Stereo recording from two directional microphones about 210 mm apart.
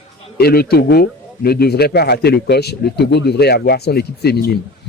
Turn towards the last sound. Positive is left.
turn(degrees=50)  # may be behind; listen again after turning